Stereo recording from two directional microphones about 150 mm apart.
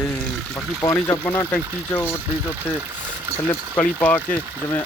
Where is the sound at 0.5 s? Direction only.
20° left (ahead or behind).